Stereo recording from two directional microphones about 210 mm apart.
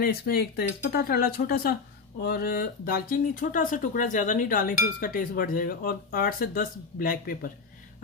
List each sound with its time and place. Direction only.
0.0 s speech: 45° left (ahead or behind)